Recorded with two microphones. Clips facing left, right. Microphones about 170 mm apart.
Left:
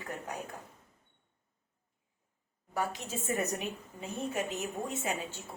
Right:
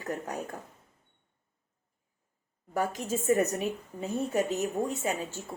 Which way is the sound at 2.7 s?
45° right (ahead or behind).